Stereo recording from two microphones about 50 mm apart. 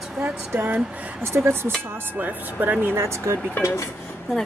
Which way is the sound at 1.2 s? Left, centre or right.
Right.